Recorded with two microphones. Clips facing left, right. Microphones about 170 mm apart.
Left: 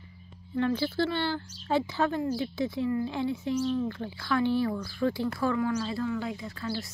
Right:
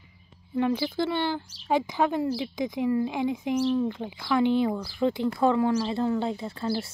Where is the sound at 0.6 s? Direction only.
15° right (ahead or behind).